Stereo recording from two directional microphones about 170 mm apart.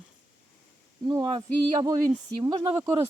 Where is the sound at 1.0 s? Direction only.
25° right (ahead or behind).